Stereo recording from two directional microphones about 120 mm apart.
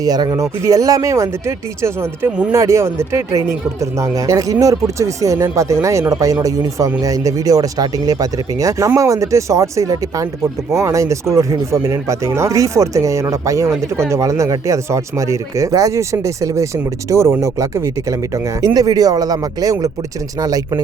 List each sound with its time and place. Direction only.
0.0 s speech: 30° right (ahead or behind)